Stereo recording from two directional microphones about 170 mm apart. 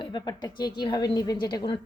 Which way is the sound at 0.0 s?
25° left (ahead or behind).